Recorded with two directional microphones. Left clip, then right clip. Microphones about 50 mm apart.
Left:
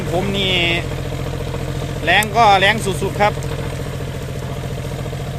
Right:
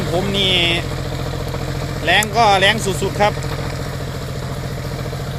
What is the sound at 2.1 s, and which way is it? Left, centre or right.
Speech, centre.